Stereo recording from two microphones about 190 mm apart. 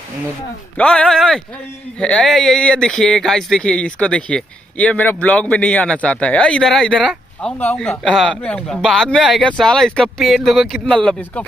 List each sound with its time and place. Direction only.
0.7 s speech: 5° left (ahead or behind)